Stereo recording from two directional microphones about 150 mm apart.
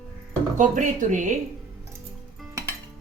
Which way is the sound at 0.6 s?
55° right (ahead or behind).